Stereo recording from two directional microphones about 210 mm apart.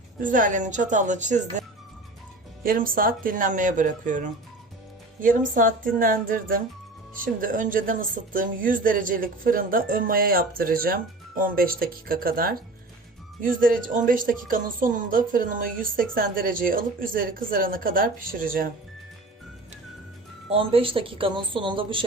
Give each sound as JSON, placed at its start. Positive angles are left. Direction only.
{"t": 0.2, "sound": "a woman's voice", "side_deg": -40}
{"t": 2.6, "sound": "a woman's voice", "side_deg": -40}
{"t": 20.5, "sound": "a woman's voice", "side_deg": -25}